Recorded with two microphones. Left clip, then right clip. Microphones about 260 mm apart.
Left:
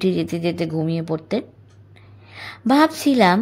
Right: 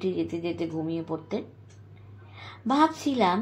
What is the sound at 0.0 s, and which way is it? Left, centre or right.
A woman's voice, left.